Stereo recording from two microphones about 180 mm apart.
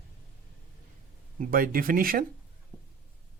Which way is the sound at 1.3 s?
50° right (ahead or behind).